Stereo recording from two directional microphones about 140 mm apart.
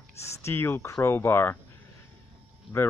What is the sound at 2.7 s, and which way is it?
Speech, 15° left (ahead or behind).